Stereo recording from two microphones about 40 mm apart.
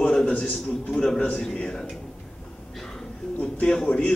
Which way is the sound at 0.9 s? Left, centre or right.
Centre.